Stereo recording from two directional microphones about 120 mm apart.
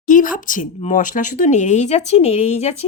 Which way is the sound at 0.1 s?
90° left.